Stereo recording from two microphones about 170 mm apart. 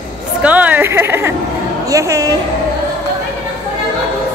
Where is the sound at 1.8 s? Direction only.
20° right (ahead or behind).